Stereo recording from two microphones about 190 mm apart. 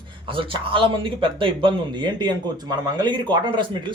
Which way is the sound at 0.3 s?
25° right (ahead or behind).